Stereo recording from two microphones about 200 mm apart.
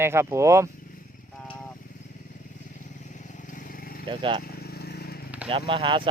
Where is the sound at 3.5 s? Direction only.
40° left (ahead or behind).